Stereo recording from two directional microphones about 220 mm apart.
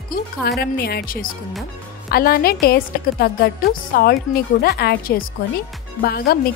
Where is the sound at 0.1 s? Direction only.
45° left (ahead or behind).